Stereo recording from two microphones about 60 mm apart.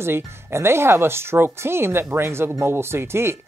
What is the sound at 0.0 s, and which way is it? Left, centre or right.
Speech, right.